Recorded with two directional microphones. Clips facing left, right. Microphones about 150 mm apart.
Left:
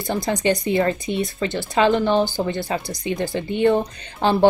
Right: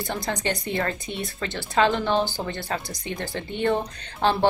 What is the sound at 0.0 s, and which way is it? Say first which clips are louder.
Speech: left 6 dB; 15° left (ahead or behind).